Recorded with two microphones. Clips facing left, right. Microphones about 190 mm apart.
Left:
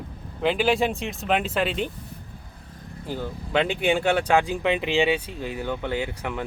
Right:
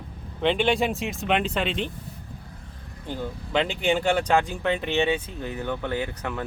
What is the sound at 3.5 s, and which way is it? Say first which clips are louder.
Speech: left 1 dB; 10° left (ahead or behind).